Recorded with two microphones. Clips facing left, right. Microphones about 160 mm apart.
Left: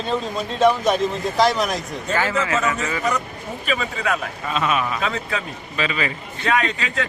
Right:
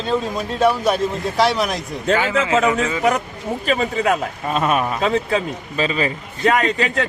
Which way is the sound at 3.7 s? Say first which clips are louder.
Right 5 dB; 35° right (ahead or behind).